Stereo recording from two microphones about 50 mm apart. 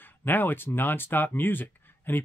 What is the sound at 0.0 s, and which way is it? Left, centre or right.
Speech, left.